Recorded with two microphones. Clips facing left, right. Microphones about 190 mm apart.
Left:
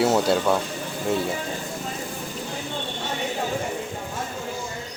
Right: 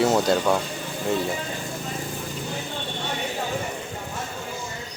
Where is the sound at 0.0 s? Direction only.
10° left (ahead or behind).